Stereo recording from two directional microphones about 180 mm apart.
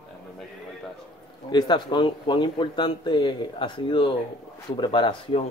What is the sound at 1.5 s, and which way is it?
A man's voice, 25° left (ahead or behind).